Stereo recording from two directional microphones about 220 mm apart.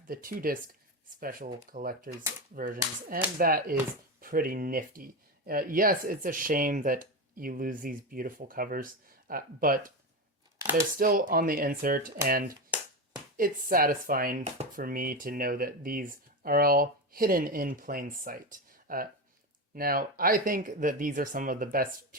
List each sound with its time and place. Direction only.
0.1 s speech: 40° right (ahead or behind)
3.3 s speech: 40° right (ahead or behind)
10.9 s speech: 40° right (ahead or behind)
14.4 s speech: 30° right (ahead or behind)
14.8 s speech: 40° right (ahead or behind)